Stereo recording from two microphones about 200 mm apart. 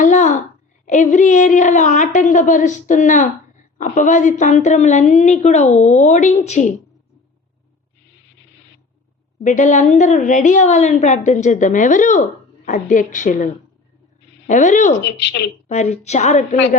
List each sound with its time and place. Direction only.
0.0 s a sound: 35° left (ahead or behind)
0.9 s a woman's voice: 40° left (ahead or behind)
9.4 s a woman's voice: 40° left (ahead or behind)
15.0 s speech: 60° left (ahead or behind)
15.7 s a woman's voice: 35° left (ahead or behind)